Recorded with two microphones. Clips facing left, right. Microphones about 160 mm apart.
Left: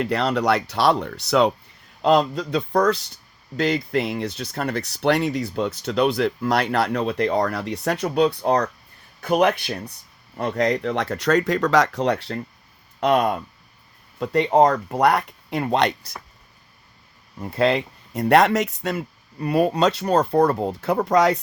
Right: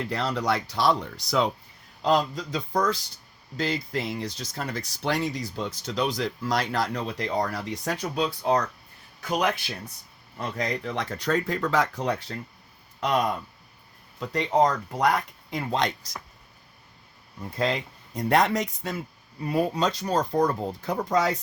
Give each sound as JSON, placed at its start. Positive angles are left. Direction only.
{"t": 0.0, "sound": "speech", "side_deg": 70}
{"t": 17.4, "sound": "speech", "side_deg": 65}